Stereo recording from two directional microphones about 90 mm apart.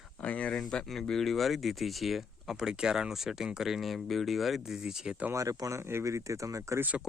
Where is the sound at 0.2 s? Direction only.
15° left (ahead or behind); by 5.1 s 5° right (ahead or behind).